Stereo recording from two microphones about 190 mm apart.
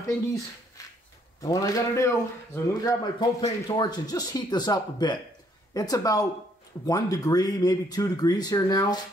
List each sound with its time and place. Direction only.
1.4 s a man's voice: 20° left (ahead or behind)